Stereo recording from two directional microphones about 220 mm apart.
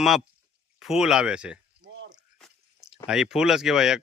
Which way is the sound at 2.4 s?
Centre (ahead or behind).